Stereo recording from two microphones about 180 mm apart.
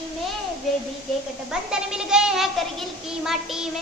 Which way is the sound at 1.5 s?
5° right (ahead or behind).